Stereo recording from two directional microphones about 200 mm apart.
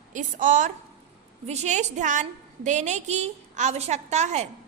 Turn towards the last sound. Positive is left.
turn(degrees=-35)  # may be behind; listen again after turning